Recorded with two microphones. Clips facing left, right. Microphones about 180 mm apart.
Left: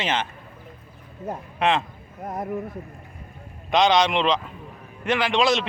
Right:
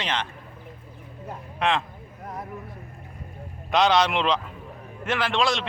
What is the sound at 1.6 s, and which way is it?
Speech, centre (ahead or behind).